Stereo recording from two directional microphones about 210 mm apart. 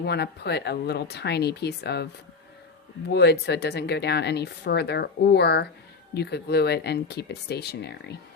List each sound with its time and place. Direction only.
0.0 s speech: 50° left (ahead or behind)
3.1 s speech: 55° left (ahead or behind)